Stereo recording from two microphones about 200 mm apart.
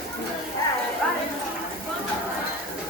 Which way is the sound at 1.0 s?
5° left (ahead or behind).